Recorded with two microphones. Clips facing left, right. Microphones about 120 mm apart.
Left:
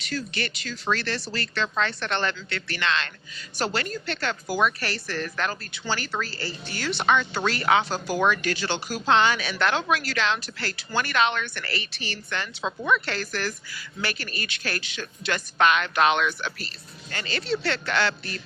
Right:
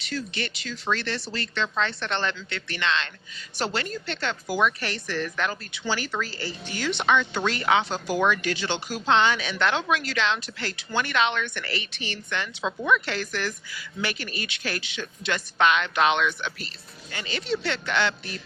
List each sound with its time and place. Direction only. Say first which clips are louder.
0.0 s speech: left 1 dB; 25° right (ahead or behind)
7.0 s speech: even; 20° left (ahead or behind)
7.3 s speech: left 1 dB; 20° right (ahead or behind)
12.6 s a woman's voice: right 1 dB; 20° left (ahead or behind)
13.1 s speech: even; 20° right (ahead or behind)